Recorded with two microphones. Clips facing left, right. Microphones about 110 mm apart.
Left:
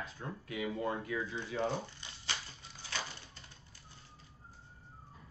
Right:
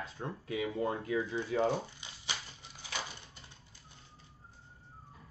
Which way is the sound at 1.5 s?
45° right (ahead or behind).